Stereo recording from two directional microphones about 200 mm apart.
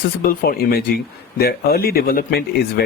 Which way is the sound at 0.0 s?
50° left (ahead or behind).